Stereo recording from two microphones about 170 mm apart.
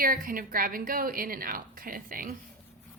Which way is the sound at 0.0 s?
55° right (ahead or behind).